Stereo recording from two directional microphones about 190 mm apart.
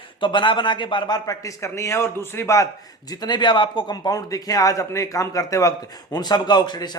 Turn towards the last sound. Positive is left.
turn(degrees=20)  # may be behind; listen again after turning